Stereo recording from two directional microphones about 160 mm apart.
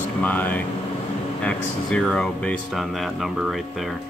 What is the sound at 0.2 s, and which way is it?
Speech, 10° left (ahead or behind).